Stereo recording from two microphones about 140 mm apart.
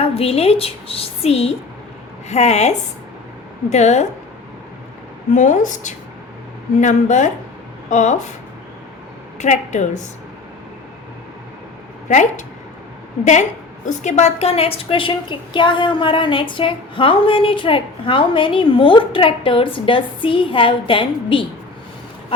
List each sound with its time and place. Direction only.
0.0 s a woman's voice: 45° left (ahead or behind)
5.3 s a woman's voice: 65° left (ahead or behind)
9.4 s a woman's voice: 60° left (ahead or behind)
12.0 s a woman's voice: 60° left (ahead or behind); by 21.4 s 35° left (ahead or behind)